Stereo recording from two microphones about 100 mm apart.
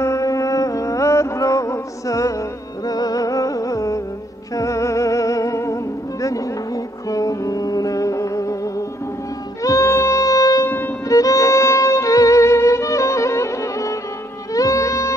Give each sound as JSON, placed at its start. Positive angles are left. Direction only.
{"t": 0.0, "sound": "music", "side_deg": 30}
{"t": 11.1, "sound": "violin", "side_deg": 35}
{"t": 14.5, "sound": "music", "side_deg": 35}